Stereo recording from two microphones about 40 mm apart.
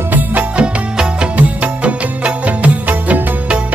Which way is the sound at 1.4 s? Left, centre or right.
Right.